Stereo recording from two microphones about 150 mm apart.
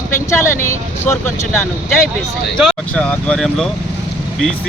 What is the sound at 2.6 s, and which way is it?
Speech, 10° left (ahead or behind).